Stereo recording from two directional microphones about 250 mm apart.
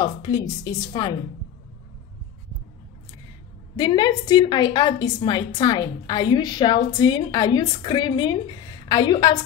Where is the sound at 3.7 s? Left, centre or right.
Centre.